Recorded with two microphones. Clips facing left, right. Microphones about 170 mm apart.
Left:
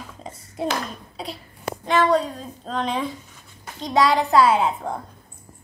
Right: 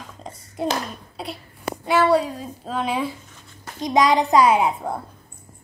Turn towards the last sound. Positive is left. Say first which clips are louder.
# right 1 dB
turn(degrees=-10)  # may be behind; listen again after turning